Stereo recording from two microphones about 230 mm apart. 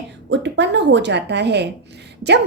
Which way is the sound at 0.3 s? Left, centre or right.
Right.